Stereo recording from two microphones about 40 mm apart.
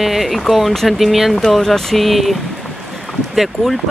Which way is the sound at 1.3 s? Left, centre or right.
Centre.